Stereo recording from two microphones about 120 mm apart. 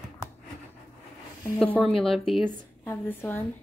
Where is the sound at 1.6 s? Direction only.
10° left (ahead or behind).